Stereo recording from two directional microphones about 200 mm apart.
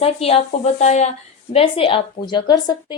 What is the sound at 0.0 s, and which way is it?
A woman's voice, 30° left (ahead or behind).